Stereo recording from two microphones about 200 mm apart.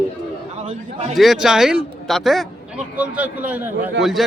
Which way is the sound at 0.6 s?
35° right (ahead or behind).